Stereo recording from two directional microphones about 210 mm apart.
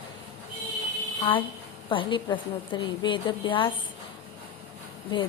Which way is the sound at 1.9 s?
25° left (ahead or behind).